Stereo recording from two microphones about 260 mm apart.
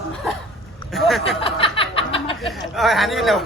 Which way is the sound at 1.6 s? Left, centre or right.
Left.